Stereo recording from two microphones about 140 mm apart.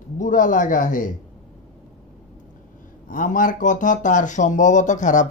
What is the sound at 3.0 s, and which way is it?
Speech, 70° left (ahead or behind).